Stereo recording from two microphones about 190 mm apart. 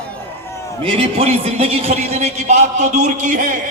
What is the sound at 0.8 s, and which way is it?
A man's voice, 30° right (ahead or behind).